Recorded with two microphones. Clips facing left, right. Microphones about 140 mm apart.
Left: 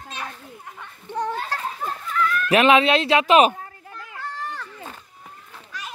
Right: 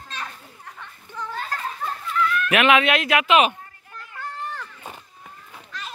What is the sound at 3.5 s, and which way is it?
Children playing, 80° left.